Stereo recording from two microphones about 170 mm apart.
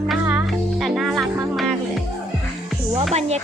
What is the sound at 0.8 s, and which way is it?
Music, centre (ahead or behind).